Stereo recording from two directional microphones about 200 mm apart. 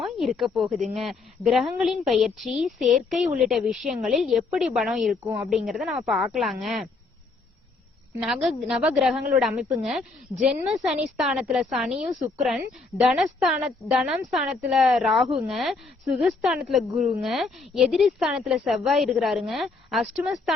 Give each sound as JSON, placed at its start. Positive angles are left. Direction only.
{"t": 0.0, "sound": "a woman's voice", "side_deg": 0}
{"t": 2.5, "sound": "a woman's voice", "side_deg": -40}
{"t": 2.9, "sound": "a woman's voice", "side_deg": 0}
{"t": 8.2, "sound": "a woman's voice", "side_deg": 0}